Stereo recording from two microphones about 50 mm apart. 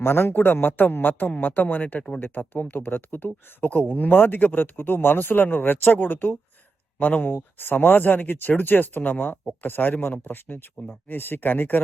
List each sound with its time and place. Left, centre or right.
0.0 s speech: left